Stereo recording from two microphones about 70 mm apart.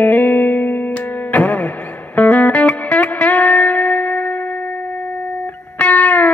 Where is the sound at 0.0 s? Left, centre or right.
Left.